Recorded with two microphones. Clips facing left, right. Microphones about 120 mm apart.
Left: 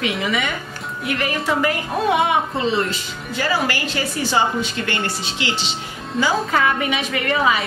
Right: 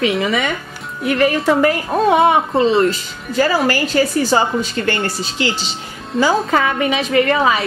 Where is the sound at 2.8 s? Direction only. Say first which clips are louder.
Right 7 dB; 40° right (ahead or behind).